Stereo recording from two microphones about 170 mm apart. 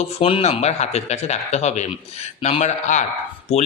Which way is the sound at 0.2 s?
35° left (ahead or behind).